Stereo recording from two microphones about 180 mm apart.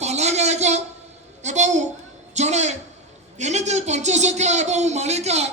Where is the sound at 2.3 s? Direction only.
40° right (ahead or behind).